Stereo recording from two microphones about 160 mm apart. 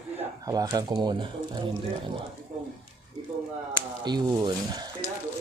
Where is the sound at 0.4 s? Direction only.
20° right (ahead or behind).